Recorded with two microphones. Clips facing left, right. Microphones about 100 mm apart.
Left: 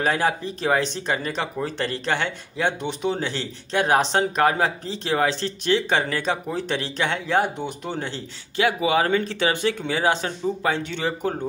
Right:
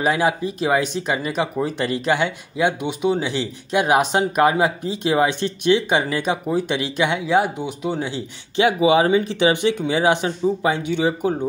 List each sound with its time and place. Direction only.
0.0 s speech: 10° right (ahead or behind)
8.5 s speech: 20° right (ahead or behind)